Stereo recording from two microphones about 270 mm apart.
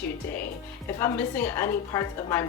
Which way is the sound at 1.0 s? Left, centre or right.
Centre.